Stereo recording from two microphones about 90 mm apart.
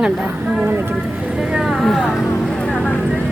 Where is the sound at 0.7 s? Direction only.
25° right (ahead or behind).